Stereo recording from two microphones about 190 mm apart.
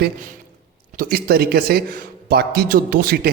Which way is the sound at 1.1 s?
55° right (ahead or behind).